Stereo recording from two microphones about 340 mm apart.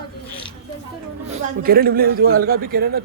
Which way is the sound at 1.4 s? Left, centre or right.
Right.